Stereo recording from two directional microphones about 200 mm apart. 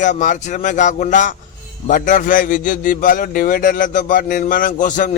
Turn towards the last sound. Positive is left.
turn(degrees=40)  # may be behind; listen again after turning